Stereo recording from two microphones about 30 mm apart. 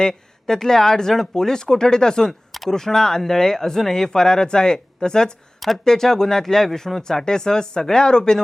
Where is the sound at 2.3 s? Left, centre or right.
Centre.